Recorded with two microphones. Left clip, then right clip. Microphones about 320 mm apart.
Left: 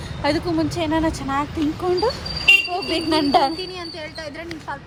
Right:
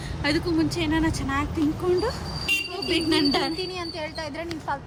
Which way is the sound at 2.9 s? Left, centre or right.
Centre.